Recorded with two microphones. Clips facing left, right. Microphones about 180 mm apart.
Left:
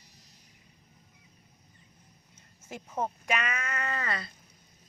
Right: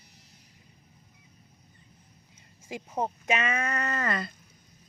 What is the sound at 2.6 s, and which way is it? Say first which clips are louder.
Speech: right 2 dB; 15° right (ahead or behind).